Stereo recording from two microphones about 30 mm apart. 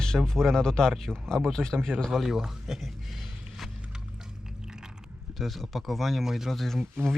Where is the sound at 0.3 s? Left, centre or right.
Centre.